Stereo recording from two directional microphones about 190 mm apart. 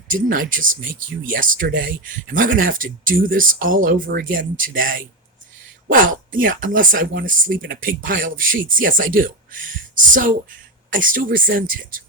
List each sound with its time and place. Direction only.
0.1 s speech: 45° right (ahead or behind)